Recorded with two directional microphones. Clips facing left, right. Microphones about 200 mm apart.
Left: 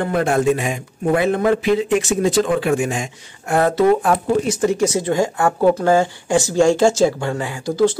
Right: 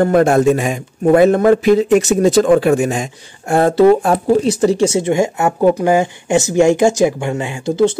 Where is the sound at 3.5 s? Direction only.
30° right (ahead or behind).